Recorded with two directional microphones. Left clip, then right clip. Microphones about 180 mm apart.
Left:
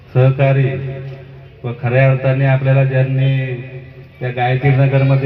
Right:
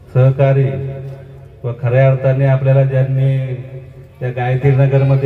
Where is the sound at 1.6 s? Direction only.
30° left (ahead or behind).